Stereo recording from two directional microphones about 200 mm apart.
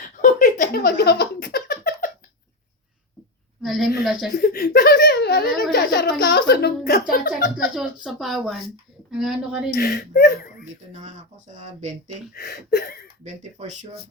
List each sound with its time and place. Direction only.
0.2 s a sound: 40° left (ahead or behind)
3.6 s a woman's voice: centre (ahead or behind)
4.4 s speech: 50° left (ahead or behind)
7.8 s speech: centre (ahead or behind)
9.7 s speech: 55° left (ahead or behind)
10.9 s speech: 35° right (ahead or behind)
12.3 s speech: 55° left (ahead or behind)
13.2 s speech: 35° right (ahead or behind)